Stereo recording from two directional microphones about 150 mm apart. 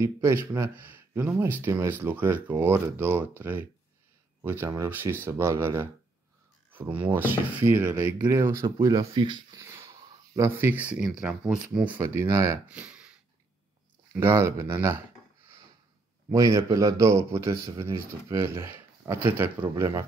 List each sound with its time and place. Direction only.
0.0 s a man's voice: 20° right (ahead or behind)
12.6 s speech: 10° right (ahead or behind)
14.1 s speech: 15° right (ahead or behind)
16.3 s a man's voice: 20° right (ahead or behind)